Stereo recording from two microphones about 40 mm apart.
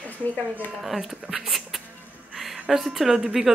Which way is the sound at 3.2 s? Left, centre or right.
Centre.